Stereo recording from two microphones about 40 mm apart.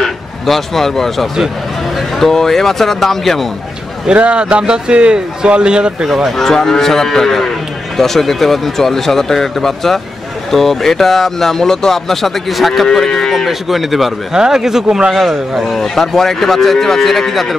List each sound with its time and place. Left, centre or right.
0.0 s a man's voice: centre
4.1 s a man's voice: right
6.0 s speech: centre
6.3 s speech: centre
12.8 s speech: centre
13.3 s speech: centre
14.3 s speech: centre
15.1 s speech: centre
15.8 s speech: centre